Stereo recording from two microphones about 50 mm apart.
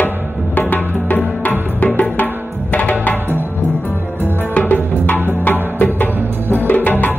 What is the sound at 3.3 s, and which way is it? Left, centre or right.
Music, right.